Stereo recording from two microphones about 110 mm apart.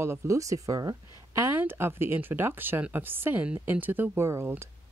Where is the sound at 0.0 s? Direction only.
25° right (ahead or behind).